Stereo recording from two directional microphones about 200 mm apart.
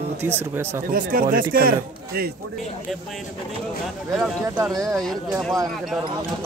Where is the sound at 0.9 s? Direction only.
45° right (ahead or behind).